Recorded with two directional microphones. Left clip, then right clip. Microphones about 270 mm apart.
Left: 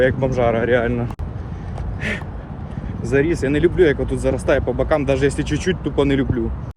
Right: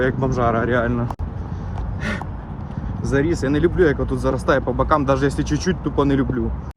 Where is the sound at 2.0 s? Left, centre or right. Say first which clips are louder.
Left 2 dB; right.